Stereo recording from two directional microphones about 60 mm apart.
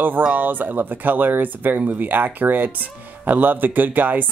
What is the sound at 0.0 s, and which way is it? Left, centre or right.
Speech, right.